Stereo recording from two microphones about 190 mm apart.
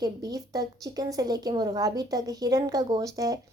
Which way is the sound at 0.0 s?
20° right (ahead or behind).